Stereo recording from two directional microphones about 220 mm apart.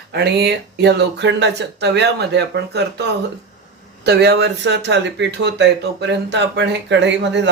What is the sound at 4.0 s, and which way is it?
Speech, 50° right (ahead or behind).